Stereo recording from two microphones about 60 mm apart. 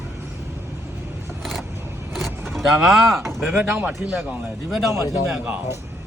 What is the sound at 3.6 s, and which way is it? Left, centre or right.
Speech, right.